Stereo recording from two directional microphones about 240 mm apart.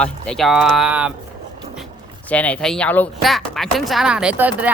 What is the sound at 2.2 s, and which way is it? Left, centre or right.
Speech, centre.